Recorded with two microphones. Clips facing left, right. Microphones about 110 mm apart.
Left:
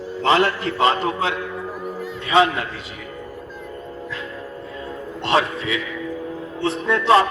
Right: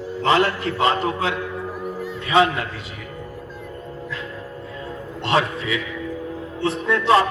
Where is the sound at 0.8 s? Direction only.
25° left (ahead or behind).